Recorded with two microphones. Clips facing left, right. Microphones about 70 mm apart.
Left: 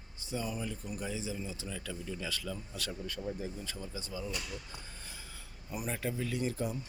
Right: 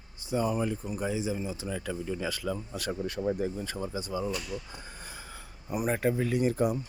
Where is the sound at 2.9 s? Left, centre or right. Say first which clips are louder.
Right 10 dB; right.